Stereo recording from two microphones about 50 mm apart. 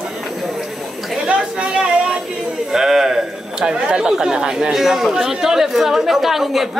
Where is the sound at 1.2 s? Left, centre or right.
Right.